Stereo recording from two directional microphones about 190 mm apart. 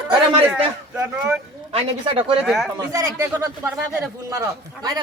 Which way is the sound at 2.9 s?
15° right (ahead or behind).